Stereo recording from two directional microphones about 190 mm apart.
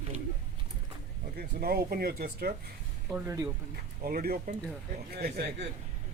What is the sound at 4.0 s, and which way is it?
Speech, 50° right (ahead or behind).